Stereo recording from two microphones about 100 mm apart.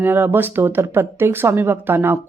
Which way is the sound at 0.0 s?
20° right (ahead or behind).